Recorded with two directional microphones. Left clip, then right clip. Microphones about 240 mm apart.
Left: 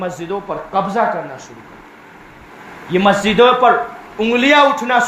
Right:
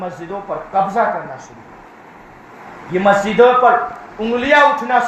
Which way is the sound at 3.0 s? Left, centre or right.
Left.